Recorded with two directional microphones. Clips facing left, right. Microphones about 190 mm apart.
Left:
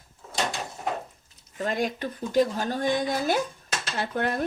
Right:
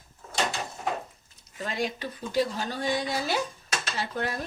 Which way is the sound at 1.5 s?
50° left (ahead or behind).